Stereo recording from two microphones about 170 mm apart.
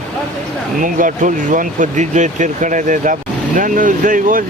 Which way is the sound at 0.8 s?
50° right (ahead or behind).